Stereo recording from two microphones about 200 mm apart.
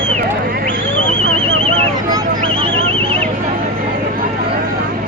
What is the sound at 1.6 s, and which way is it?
Horse, 25° right (ahead or behind).